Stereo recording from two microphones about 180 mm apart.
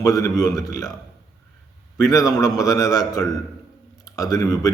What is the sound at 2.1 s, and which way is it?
A man's voice, 20° left (ahead or behind).